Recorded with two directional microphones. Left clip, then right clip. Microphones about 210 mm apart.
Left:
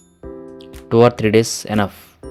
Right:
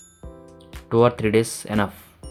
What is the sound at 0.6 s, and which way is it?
Speech, 25° left (ahead or behind).